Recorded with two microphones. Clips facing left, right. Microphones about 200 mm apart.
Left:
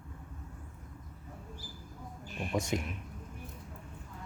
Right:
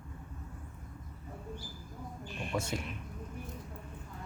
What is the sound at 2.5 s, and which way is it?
Speech, 15° left (ahead or behind).